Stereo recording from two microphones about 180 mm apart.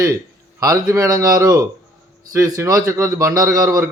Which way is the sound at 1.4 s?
15° right (ahead or behind).